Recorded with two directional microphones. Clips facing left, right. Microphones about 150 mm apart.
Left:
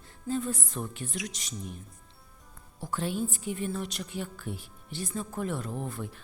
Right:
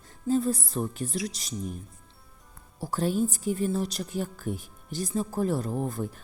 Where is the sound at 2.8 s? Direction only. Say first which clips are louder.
Right 5 dB; 40° right (ahead or behind).